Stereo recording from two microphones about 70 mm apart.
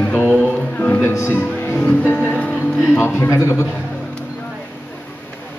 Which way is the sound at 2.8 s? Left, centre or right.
Left.